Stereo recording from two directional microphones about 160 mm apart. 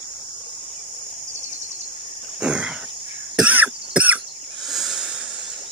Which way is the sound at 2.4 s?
5° right (ahead or behind).